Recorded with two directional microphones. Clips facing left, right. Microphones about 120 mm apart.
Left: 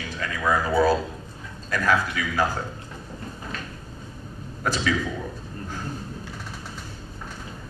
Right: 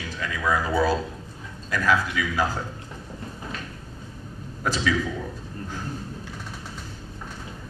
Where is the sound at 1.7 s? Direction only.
45° left (ahead or behind).